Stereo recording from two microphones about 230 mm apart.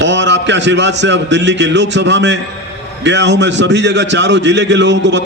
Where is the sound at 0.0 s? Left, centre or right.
Right.